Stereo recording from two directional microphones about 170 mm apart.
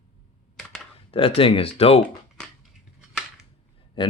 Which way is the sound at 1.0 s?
35° left (ahead or behind).